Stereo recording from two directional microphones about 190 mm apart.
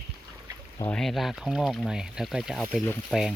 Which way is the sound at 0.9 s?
Centre (ahead or behind).